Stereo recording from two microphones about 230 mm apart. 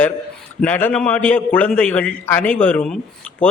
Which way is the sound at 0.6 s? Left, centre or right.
Centre.